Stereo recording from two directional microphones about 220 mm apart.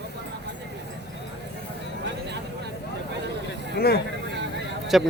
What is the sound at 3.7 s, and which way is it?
Speech, 45° left (ahead or behind).